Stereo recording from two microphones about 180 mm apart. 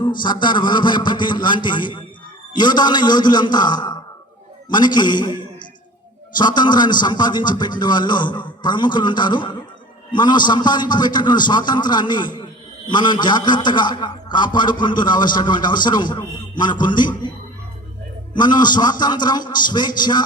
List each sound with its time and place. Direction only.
0.0 s a man's voice: 25° left (ahead or behind)
6.3 s a man's voice: 25° left (ahead or behind)
18.3 s a man's voice: 25° left (ahead or behind)